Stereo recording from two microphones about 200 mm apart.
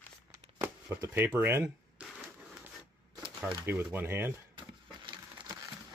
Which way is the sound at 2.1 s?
5° right (ahead or behind).